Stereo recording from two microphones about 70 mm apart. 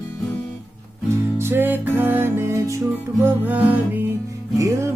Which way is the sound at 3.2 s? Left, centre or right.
Right.